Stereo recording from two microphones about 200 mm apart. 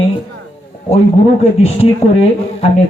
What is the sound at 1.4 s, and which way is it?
Speech, 30° left (ahead or behind).